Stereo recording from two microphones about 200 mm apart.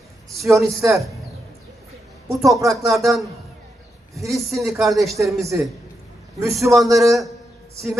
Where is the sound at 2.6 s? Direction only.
Centre (ahead or behind).